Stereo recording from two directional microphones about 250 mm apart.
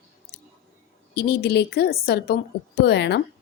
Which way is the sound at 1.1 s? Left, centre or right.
Left.